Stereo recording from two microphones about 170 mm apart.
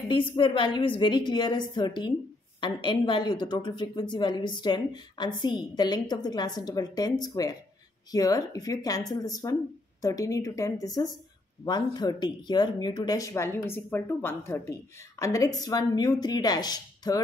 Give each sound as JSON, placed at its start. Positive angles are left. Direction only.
{"t": 0.1, "sound": "speech", "side_deg": 30}